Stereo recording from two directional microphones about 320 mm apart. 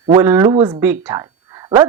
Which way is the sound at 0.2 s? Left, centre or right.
Centre.